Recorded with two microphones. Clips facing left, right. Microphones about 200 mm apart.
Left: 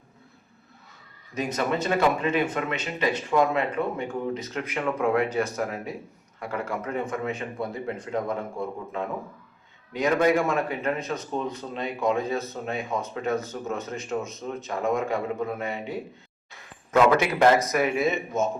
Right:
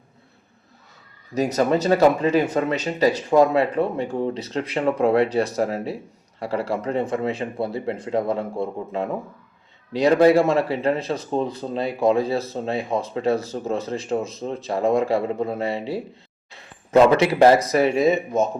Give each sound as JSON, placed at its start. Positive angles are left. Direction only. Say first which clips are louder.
{"t": 1.3, "sound": "speech", "louder": "right 7 dB", "side_deg": -40}